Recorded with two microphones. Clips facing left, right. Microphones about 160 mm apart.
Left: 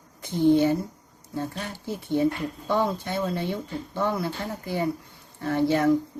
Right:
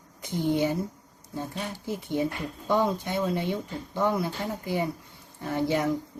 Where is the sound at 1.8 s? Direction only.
15° right (ahead or behind).